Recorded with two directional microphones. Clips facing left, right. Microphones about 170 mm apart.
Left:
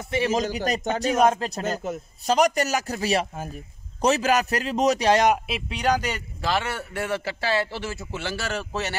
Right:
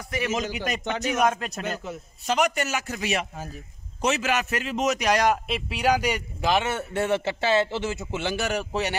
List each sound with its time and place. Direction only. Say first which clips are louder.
0.0 s a man's voice: left 4 dB; 30° left (ahead or behind)
5.5 s a man's voice: right 1 dB; 5° right (ahead or behind)